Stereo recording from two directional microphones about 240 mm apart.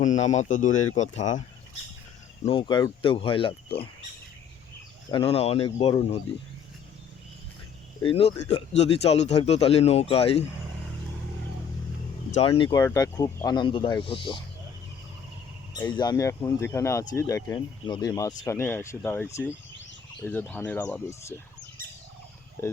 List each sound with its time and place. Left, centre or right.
0.0 s a man's voice: left
2.4 s speech: left
5.1 s speech: left
8.0 s speech: left
12.3 s speech: left
15.7 s speech: centre